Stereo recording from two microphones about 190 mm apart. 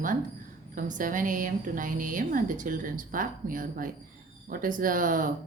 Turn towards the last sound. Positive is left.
turn(degrees=-45)  # may be behind; listen again after turning